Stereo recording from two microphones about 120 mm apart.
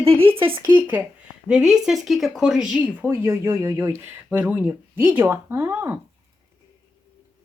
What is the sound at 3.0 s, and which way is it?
Speech, 20° right (ahead or behind).